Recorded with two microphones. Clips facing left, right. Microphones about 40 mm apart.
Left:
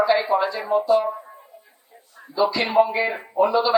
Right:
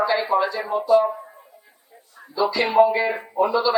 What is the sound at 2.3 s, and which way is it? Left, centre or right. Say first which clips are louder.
Speech: even; left.